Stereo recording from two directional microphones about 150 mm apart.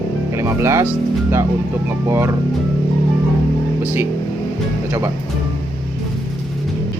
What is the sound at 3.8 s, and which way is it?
Speech, 15° right (ahead or behind).